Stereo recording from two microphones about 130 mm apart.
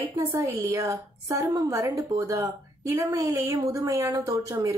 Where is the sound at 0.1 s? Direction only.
25° right (ahead or behind).